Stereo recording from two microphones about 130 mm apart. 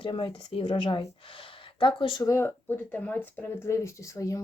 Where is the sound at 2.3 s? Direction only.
20° left (ahead or behind).